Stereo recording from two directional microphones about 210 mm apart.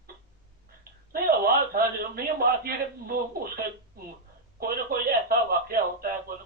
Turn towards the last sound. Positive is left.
turn(degrees=-45)  # may be behind; listen again after turning